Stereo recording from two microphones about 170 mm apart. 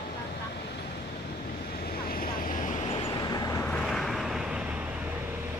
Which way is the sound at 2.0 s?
55° left (ahead or behind).